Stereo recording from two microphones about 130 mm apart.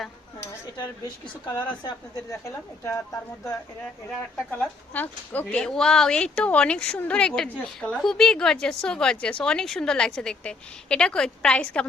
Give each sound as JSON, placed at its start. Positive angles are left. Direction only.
{"t": 1.0, "sound": "speech", "side_deg": 30}
{"t": 2.3, "sound": "speech", "side_deg": 20}
{"t": 4.4, "sound": "a woman's voice", "side_deg": 10}